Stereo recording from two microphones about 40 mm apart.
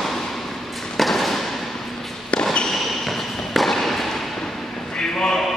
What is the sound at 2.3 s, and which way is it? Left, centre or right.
Basketball bounce, left.